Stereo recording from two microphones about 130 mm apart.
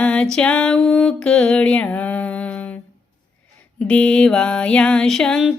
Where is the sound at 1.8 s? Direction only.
10° left (ahead or behind).